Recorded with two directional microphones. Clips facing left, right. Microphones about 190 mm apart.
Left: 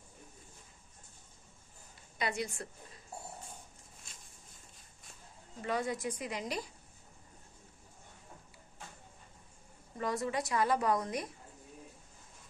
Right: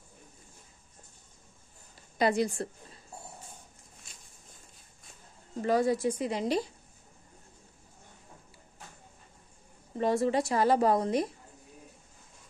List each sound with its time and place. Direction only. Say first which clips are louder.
2.1 s a woman's voice: right 10 dB; 35° right (ahead or behind)
5.6 s a woman's voice: right 9 dB; 35° right (ahead or behind)
9.9 s a woman's voice: right 8 dB; 30° right (ahead or behind)